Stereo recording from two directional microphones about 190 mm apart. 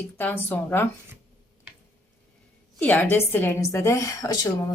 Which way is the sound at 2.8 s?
10° left (ahead or behind).